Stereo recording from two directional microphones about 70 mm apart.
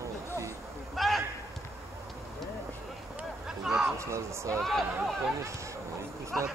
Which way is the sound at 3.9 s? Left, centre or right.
Right.